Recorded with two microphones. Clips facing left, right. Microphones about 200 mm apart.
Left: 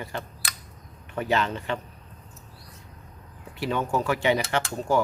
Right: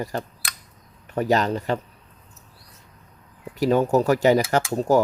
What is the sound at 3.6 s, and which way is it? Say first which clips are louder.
Speech: right 8 dB; 40° right (ahead or behind).